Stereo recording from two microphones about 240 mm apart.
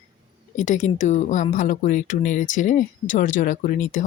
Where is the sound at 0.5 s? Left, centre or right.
Left.